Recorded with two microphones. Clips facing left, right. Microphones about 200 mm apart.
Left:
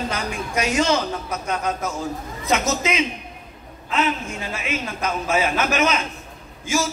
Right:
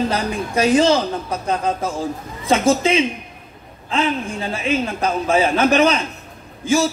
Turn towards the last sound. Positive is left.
turn(degrees=-30)  # may be behind; listen again after turning